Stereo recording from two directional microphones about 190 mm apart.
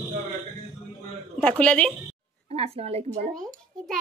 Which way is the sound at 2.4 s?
30° right (ahead or behind).